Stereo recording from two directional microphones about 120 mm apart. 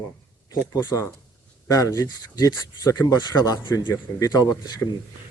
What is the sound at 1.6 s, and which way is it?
A man's voice, 30° left (ahead or behind).